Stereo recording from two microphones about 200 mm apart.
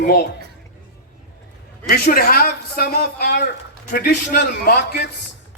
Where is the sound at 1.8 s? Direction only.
50° left (ahead or behind).